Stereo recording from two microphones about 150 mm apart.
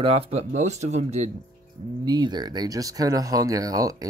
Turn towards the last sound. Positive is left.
turn(degrees=-25)  # may be behind; listen again after turning